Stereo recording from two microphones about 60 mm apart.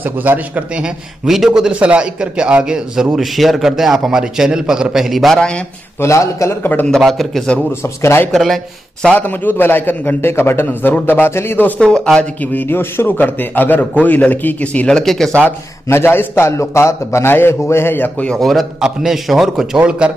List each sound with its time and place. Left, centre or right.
0.0 s a man's voice: right
1.2 s a man's voice: centre
1.7 s a man's voice: right; by 5.4 s centre
5.9 s a man's voice: left
6.6 s a man's voice: left
7.0 s a man's voice: centre
9.2 s a man's voice: left
11.8 s speech: centre
12.5 s a man's voice: left
14.9 s speech: centre
15.9 s a man's voice: left
18.4 s a man's voice: centre